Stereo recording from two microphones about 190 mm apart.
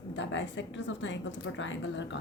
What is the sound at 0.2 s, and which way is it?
A woman's voice, 75° left (ahead or behind).